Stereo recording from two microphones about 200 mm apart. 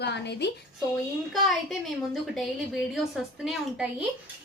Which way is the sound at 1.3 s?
Centre (ahead or behind).